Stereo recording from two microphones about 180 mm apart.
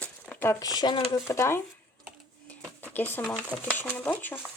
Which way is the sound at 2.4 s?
10° left (ahead or behind).